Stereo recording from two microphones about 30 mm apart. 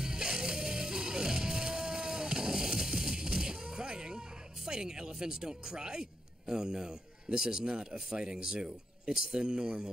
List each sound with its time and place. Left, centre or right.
0.0 s music: right
4.6 s speech: right